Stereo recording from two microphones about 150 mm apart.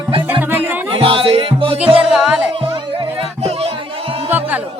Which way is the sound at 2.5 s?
35° right (ahead or behind).